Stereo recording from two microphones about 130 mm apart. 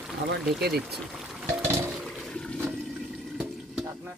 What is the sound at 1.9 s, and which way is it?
Toilet flush, centre (ahead or behind).